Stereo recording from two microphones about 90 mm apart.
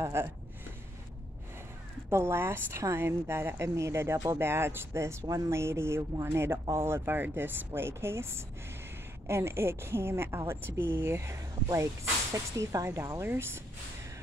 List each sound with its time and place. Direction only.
0.0 s a woman's voice: 30° right (ahead or behind)
2.0 s a woman's voice: 30° right (ahead or behind)